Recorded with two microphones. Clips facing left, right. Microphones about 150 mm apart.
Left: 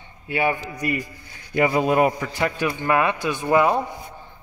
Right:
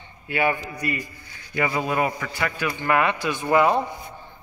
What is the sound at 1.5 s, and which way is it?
Speech, 40° left (ahead or behind).